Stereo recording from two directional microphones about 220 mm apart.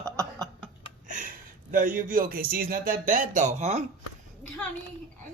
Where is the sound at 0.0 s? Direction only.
15° right (ahead or behind).